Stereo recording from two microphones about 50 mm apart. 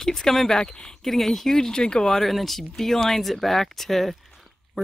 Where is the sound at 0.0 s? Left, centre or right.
Centre.